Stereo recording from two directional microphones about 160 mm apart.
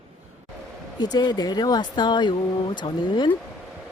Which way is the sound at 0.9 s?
25° left (ahead or behind).